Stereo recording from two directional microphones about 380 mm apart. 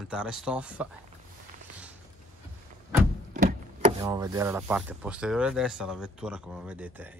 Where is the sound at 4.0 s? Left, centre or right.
Centre.